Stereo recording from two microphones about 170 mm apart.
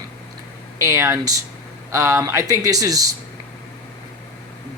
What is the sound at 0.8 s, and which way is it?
A man's voice, 15° right (ahead or behind).